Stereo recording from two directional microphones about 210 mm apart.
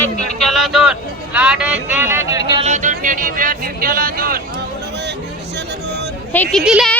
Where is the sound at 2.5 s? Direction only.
35° right (ahead or behind).